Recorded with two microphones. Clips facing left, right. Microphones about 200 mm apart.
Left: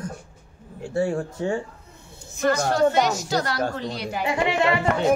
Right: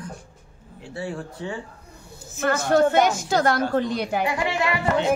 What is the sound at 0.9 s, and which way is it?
Speech, 45° left (ahead or behind).